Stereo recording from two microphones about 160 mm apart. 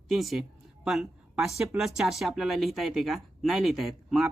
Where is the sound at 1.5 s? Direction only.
5° right (ahead or behind).